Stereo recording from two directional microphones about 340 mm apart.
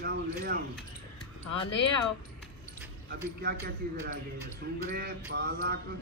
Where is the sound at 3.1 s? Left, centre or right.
Right.